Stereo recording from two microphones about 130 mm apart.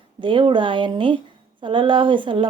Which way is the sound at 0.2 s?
40° right (ahead or behind).